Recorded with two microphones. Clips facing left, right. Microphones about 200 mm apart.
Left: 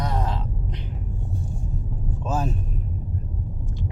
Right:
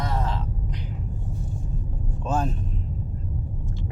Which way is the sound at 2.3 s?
5° left (ahead or behind).